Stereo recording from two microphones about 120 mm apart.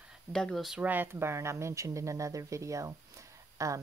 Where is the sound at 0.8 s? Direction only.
15° right (ahead or behind).